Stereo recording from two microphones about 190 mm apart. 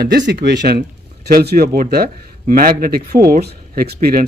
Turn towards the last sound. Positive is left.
turn(degrees=-50)  # may be behind; listen again after turning